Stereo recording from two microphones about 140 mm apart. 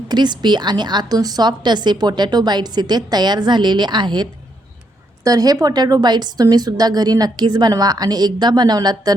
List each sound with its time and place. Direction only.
0.1 s a woman's voice: 30° right (ahead or behind)